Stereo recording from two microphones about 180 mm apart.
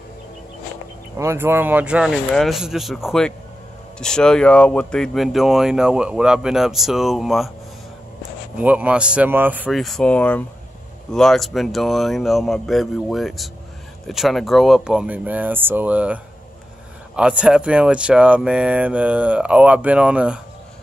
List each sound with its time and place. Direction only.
1.1 s speech: 15° right (ahead or behind)
8.5 s speech: 10° right (ahead or behind)